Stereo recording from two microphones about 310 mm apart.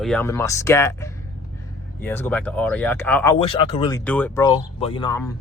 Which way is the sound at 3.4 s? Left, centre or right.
Centre.